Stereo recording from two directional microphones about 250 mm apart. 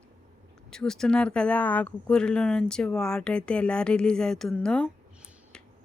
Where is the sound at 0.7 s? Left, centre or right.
Centre.